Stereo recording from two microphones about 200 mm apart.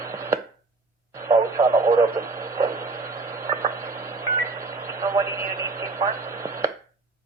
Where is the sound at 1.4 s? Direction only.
15° right (ahead or behind).